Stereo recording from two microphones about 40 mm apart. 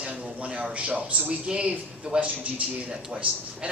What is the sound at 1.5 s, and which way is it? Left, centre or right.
A man's voice, right.